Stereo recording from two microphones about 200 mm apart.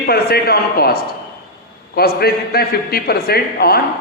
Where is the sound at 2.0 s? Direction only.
50° left (ahead or behind).